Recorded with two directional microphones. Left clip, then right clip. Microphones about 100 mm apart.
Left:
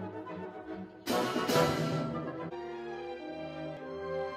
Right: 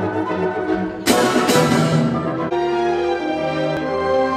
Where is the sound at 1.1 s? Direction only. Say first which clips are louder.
Right 15 dB; centre (ahead or behind).